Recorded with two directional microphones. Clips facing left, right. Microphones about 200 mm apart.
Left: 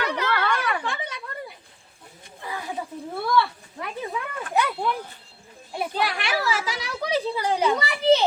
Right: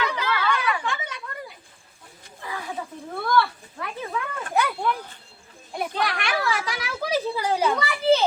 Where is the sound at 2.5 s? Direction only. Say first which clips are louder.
Left 1 dB; 20° left (ahead or behind).